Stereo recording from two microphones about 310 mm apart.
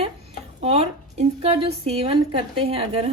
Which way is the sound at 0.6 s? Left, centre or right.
Centre.